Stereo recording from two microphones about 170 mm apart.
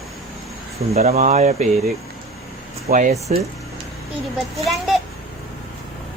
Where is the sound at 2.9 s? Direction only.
45° right (ahead or behind).